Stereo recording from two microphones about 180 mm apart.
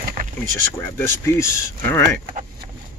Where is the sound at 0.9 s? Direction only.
15° left (ahead or behind).